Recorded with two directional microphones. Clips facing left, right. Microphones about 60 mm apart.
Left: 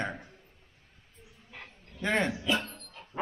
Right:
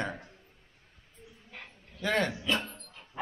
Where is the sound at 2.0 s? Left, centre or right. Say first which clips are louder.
Even; centre.